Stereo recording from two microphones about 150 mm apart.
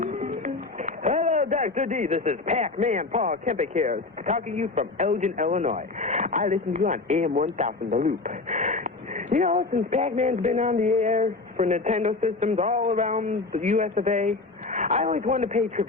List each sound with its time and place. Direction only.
0.0 s music: 55° right (ahead or behind)
0.3 s speech: 50° right (ahead or behind)
8.0 s a sound: 55° right (ahead or behind)
9.6 s speech: 55° right (ahead or behind)